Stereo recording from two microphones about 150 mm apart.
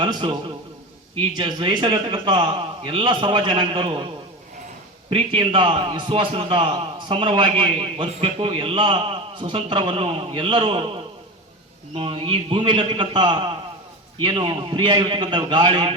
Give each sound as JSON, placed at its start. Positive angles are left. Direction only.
{"t": 0.0, "sound": "a man's voice", "side_deg": -35}
{"t": 5.0, "sound": "a man's voice", "side_deg": -40}